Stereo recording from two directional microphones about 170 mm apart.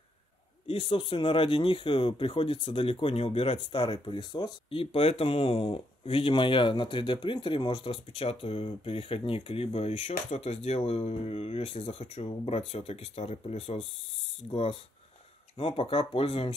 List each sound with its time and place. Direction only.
0.7 s speech: 35° left (ahead or behind)